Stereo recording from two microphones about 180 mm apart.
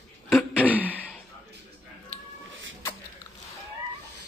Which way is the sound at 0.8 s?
10° left (ahead or behind).